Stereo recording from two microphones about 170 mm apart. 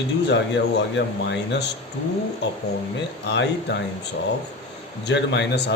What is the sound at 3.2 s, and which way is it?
Speech, 90° left.